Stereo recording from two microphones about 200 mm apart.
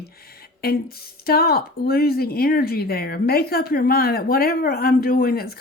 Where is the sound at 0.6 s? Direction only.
50° left (ahead or behind).